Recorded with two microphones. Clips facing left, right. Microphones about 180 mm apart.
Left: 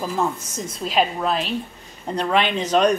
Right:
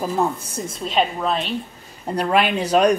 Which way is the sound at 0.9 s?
Centre (ahead or behind).